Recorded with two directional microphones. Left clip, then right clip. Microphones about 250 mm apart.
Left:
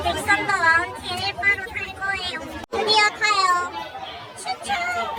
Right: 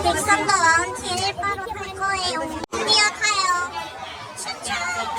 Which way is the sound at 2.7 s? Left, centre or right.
Centre.